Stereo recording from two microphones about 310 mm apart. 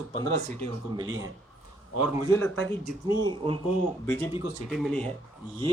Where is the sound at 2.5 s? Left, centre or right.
Centre.